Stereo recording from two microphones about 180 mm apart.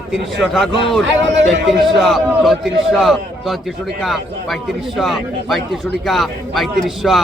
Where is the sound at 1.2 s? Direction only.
80° right.